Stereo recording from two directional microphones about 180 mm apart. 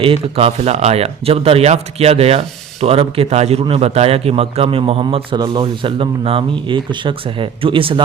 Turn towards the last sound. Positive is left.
turn(degrees=-30)  # may be behind; listen again after turning